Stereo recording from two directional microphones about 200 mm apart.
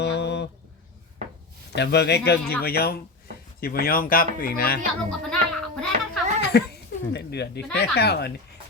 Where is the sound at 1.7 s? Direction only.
55° left (ahead or behind).